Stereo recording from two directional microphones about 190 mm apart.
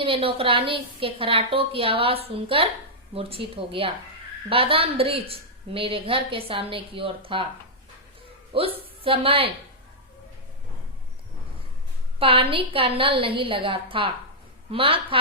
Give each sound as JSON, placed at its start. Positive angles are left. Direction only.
{"t": 0.0, "sound": "a woman's voice", "side_deg": -30}
{"t": 8.5, "sound": "a woman's voice", "side_deg": -30}
{"t": 12.2, "sound": "a woman's voice", "side_deg": -30}